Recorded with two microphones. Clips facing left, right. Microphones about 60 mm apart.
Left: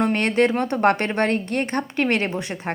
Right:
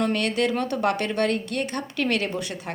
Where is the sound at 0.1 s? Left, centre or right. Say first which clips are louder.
Left 4 dB; left.